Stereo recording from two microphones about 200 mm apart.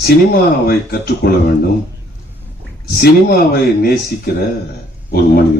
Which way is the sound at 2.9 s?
50° left (ahead or behind).